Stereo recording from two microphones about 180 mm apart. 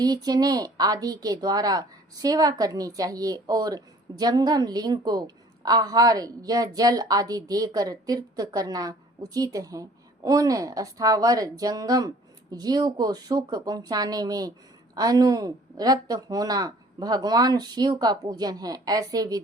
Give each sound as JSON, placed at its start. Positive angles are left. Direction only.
{"t": 0.0, "sound": "a woman's voice", "side_deg": -20}